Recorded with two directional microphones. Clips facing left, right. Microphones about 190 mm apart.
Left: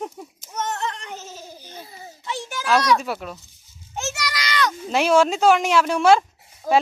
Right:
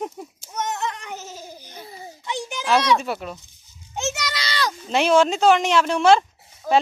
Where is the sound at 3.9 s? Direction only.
20° right (ahead or behind).